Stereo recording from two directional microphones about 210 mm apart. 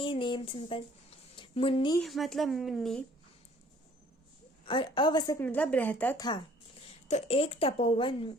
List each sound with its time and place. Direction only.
0.0 s speech: 25° left (ahead or behind)
2.0 s a woman's voice: centre (ahead or behind)
4.6 s a woman's voice: 25° left (ahead or behind)
7.1 s speech: 30° left (ahead or behind)